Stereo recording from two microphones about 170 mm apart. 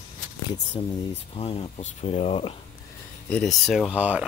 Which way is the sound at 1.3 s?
35° left (ahead or behind).